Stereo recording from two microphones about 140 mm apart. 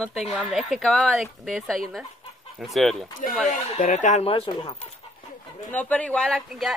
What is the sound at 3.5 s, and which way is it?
Speech, 70° left (ahead or behind).